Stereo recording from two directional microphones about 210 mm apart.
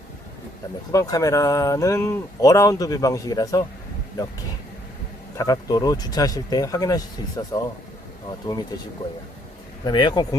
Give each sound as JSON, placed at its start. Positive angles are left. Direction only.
{"t": 0.9, "sound": "speech", "side_deg": 15}
{"t": 5.4, "sound": "speech", "side_deg": 15}
{"t": 9.8, "sound": "speech", "side_deg": 20}